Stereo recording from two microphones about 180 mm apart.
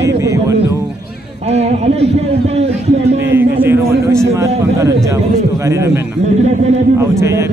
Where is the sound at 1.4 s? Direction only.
35° right (ahead or behind).